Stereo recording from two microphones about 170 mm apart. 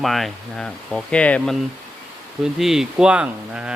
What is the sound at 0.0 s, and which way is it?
Speech, centre (ahead or behind).